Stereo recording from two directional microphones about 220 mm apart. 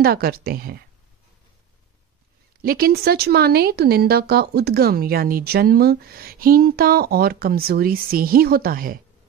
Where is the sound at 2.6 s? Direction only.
45° right (ahead or behind).